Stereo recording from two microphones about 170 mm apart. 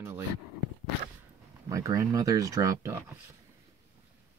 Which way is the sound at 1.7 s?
20° right (ahead or behind).